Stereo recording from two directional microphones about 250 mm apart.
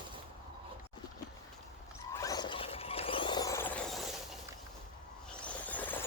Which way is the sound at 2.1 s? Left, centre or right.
Centre.